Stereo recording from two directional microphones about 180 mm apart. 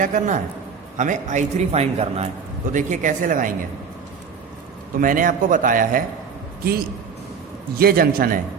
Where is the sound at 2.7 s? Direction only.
45° right (ahead or behind).